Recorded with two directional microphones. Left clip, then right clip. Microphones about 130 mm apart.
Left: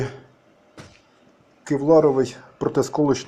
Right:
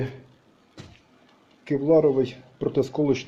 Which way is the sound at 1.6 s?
15° left (ahead or behind).